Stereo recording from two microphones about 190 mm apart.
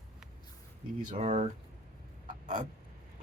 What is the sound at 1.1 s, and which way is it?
Speech, 35° right (ahead or behind).